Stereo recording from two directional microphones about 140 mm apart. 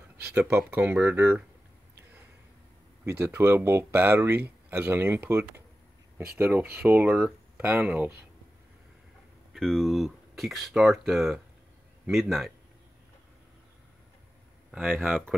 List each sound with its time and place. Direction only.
0.3 s speech: 15° right (ahead or behind)
3.1 s speech: 15° right (ahead or behind)
9.5 s speech: centre (ahead or behind)
14.7 s speech: 10° right (ahead or behind)